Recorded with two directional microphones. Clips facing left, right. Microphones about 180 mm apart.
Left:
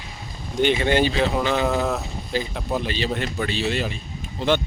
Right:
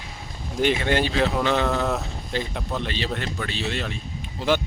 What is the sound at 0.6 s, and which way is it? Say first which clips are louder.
Speech: left 2 dB; centre (ahead or behind).